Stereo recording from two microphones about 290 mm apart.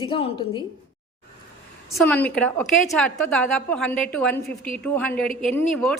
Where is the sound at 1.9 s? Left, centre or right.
Centre.